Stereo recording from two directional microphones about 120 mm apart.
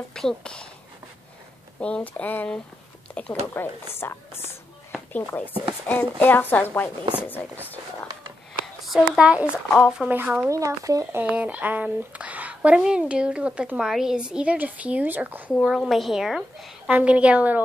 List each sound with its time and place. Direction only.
0.1 s a woman's voice: 5° left (ahead or behind)
1.8 s a woman's voice: 10° left (ahead or behind)
8.8 s a woman's voice: 5° right (ahead or behind); by 11.2 s 25° right (ahead or behind)
11.2 s speech: 10° right (ahead or behind)
15.6 s a woman's voice: centre (ahead or behind)